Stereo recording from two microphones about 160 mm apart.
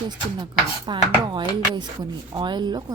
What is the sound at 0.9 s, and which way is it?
A woman's voice, 30° right (ahead or behind).